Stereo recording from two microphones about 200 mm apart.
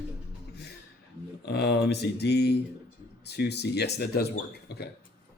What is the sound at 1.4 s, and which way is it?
Speech, 55° left (ahead or behind).